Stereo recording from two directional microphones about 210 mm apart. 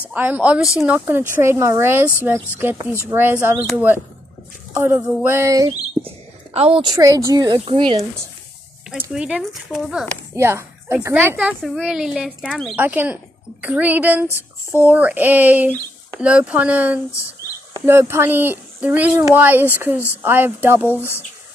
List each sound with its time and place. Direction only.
0.0 s a child's voice: 10° right (ahead or behind)
6.0 s a woman's voice: 30° right (ahead or behind)
8.9 s a child's voice: 5° right (ahead or behind)
20.9 s speech: 10° left (ahead or behind)